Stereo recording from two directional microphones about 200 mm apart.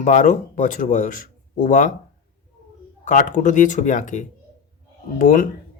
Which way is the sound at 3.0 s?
40° left (ahead or behind).